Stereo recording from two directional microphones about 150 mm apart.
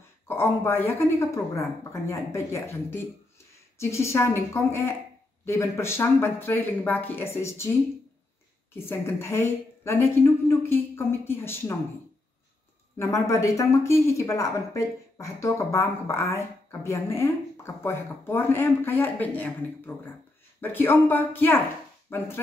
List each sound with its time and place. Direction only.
0.3 s a woman's voice: 15° left (ahead or behind)
8.7 s a woman's voice: 15° left (ahead or behind)
12.9 s a woman's voice: 20° left (ahead or behind)